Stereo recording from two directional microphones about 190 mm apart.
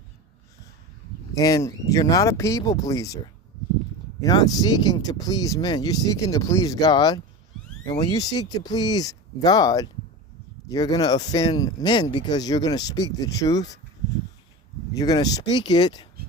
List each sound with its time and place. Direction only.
1.4 s speech: 15° left (ahead or behind)
4.2 s speech: 20° left (ahead or behind)
14.9 s speech: 20° left (ahead or behind)